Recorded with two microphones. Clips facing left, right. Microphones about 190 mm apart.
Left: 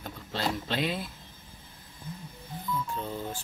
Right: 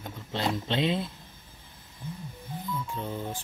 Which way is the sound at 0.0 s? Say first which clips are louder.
Right 2 dB; 20° right (ahead or behind).